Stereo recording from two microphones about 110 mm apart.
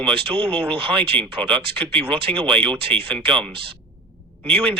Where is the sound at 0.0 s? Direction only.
55° right (ahead or behind).